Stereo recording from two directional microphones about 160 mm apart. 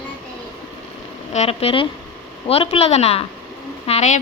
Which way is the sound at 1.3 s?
40° left (ahead or behind).